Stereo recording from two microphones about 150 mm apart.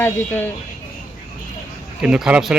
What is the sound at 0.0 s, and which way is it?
Speech, 10° left (ahead or behind).